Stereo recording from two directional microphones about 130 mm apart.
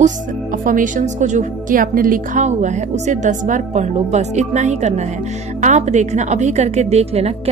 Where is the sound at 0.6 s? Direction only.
85° right.